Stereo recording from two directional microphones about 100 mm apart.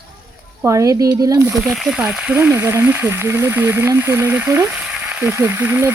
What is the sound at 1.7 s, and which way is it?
Speech, 5° right (ahead or behind).